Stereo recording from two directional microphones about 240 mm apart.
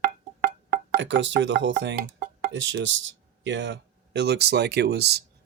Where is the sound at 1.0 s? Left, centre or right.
Right.